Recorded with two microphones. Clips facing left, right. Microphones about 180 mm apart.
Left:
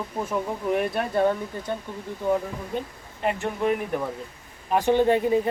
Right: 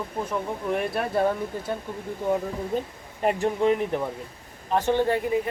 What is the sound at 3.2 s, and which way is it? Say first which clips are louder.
Speech: right 2 dB; 45° right (ahead or behind).